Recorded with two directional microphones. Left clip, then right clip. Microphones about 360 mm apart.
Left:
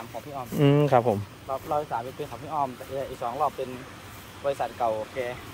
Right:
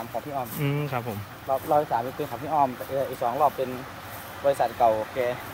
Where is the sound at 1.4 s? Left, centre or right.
Right.